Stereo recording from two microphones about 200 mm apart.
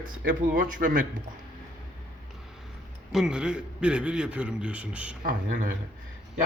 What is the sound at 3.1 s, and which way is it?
A man's voice, 5° right (ahead or behind).